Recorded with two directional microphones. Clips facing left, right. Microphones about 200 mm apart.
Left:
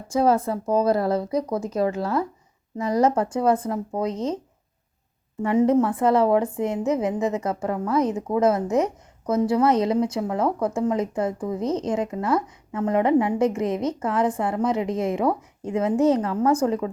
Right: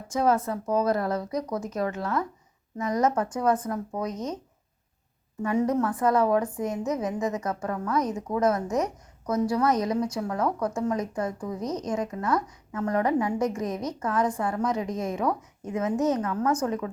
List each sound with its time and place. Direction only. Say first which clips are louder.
0.1 s a woman's voice: left 4 dB; 30° left (ahead or behind)
5.4 s a woman's voice: left 6 dB; 25° left (ahead or behind)